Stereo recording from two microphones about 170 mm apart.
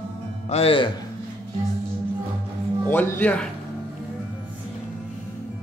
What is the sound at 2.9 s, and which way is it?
Speech, 10° left (ahead or behind).